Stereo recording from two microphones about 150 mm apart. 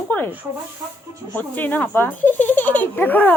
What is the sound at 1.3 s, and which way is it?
A child's voice, 10° left (ahead or behind).